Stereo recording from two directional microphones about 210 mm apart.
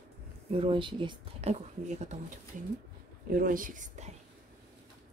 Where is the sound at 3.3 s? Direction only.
40° right (ahead or behind).